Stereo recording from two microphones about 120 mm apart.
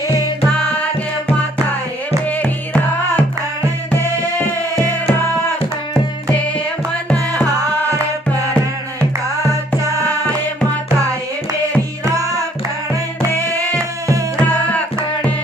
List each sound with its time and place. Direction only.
2.2 s music: 10° left (ahead or behind)
13.7 s music: 25° right (ahead or behind)
14.5 s music: 10° left (ahead or behind)